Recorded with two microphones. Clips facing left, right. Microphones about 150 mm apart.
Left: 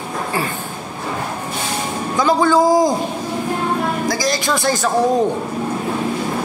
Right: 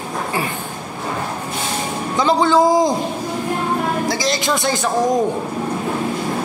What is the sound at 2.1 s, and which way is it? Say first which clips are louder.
Speech: even; 20° right (ahead or behind).